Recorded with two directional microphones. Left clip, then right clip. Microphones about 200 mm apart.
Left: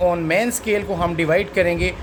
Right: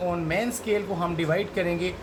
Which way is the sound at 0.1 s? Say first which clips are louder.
Left 8 dB; 60° left (ahead or behind).